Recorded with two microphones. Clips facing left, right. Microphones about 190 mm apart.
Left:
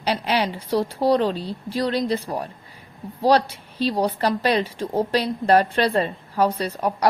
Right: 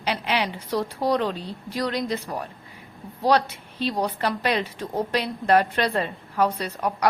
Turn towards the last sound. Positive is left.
turn(degrees=30)  # may be behind; listen again after turning